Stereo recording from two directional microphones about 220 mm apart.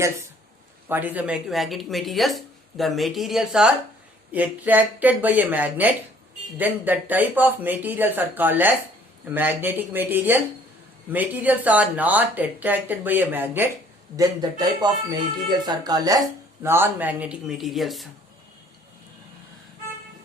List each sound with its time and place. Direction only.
0.9 s speech: 10° right (ahead or behind)
14.8 s speech: 20° right (ahead or behind); by 18.1 s centre (ahead or behind)